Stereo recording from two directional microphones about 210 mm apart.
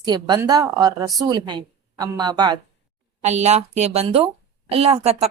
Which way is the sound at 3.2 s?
30° right (ahead or behind).